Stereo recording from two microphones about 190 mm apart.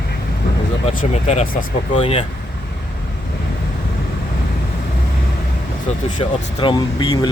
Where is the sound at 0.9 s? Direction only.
35° left (ahead or behind).